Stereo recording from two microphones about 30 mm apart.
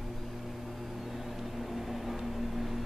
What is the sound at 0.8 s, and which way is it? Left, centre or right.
Vehicle, centre.